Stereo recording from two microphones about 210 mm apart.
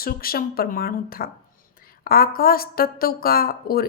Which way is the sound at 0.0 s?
45° left (ahead or behind).